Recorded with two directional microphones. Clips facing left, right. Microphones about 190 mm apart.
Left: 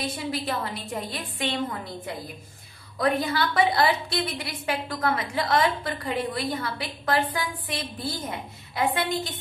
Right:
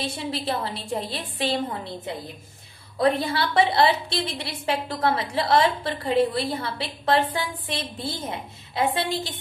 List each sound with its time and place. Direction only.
0.0 s a woman's voice: 30° right (ahead or behind)